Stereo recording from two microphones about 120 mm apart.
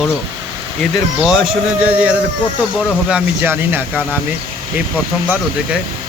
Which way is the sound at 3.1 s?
15° right (ahead or behind).